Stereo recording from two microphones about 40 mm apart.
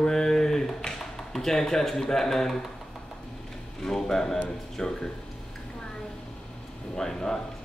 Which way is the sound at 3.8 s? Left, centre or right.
Centre.